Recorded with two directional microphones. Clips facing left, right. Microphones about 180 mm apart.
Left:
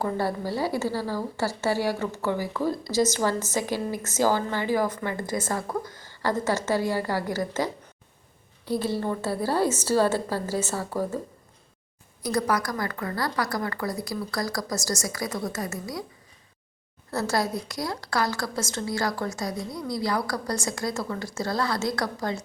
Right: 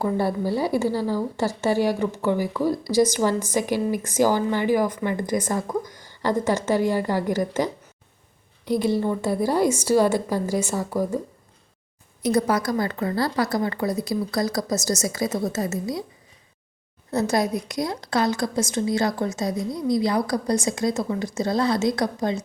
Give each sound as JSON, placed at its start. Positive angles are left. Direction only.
{"t": 0.0, "sound": "a woman's voice", "side_deg": -15}
{"t": 12.2, "sound": "a woman's voice", "side_deg": -25}
{"t": 17.1, "sound": "a woman's voice", "side_deg": -20}